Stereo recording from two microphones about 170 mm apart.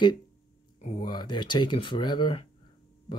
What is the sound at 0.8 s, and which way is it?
Speech, 40° left (ahead or behind).